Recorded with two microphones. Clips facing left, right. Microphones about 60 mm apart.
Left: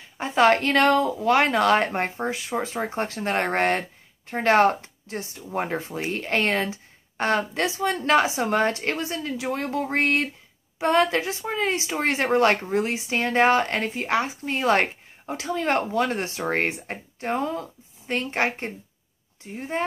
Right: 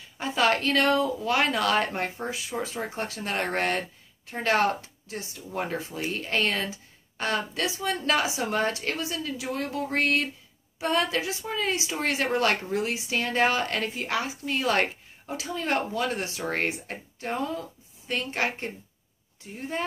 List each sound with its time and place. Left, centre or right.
0.2 s speech: left